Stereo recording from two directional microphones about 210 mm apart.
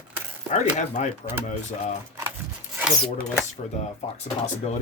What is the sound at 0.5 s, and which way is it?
Speech, 35° left (ahead or behind).